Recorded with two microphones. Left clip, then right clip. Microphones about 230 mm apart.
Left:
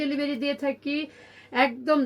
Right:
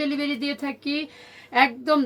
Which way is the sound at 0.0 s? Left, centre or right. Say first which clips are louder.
Right 1 dB; centre.